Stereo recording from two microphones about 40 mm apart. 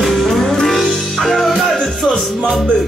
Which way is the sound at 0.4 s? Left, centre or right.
Centre.